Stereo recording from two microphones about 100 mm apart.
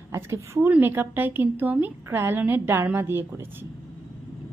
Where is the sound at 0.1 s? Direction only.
25° right (ahead or behind).